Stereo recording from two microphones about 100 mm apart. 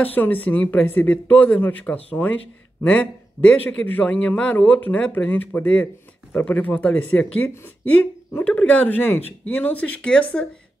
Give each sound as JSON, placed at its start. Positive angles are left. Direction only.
{"t": 0.0, "sound": "a man's voice", "side_deg": 15}